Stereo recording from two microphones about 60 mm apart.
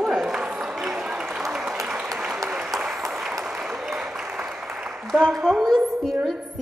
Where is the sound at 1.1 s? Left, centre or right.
Centre.